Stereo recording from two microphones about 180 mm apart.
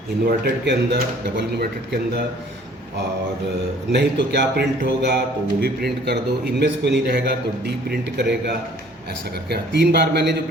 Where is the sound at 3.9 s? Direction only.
70° right (ahead or behind).